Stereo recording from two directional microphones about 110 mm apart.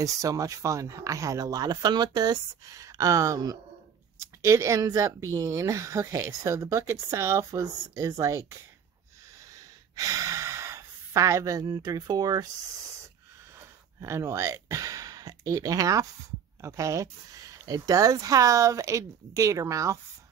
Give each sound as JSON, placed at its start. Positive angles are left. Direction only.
{"t": 0.0, "sound": "speech", "side_deg": -30}
{"t": 9.4, "sound": "sigh", "side_deg": -30}
{"t": 14.0, "sound": "speech", "side_deg": -25}